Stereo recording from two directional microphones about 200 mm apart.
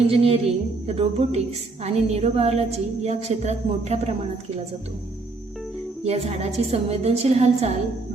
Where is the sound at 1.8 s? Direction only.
30° right (ahead or behind).